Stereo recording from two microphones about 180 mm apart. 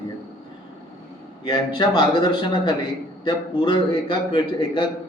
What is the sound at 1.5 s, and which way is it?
A man's voice, 25° left (ahead or behind).